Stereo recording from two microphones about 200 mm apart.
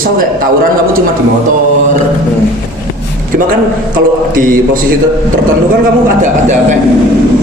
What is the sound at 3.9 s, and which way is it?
A man's voice, 45° right (ahead or behind).